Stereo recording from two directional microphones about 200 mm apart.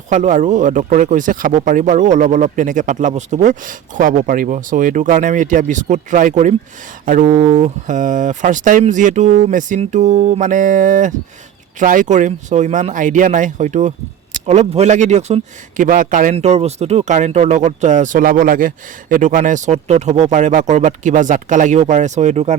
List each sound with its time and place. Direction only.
0.1 s speech: 40° right (ahead or behind)